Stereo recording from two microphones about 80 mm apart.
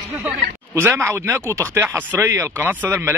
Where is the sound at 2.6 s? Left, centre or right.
Right.